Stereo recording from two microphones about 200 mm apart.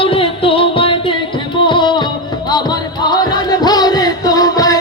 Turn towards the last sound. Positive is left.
turn(degrees=20)  # may be behind; listen again after turning